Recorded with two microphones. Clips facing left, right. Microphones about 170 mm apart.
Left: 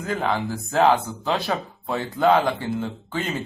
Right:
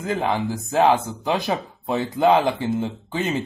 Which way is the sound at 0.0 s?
15° right (ahead or behind).